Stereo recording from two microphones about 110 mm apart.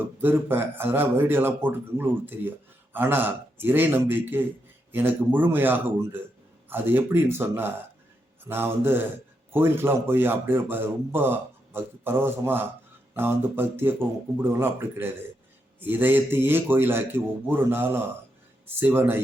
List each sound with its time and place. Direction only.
0.2 s speech: 20° right (ahead or behind)